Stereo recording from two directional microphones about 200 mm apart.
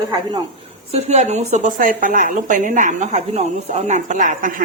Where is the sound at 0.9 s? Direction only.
35° right (ahead or behind).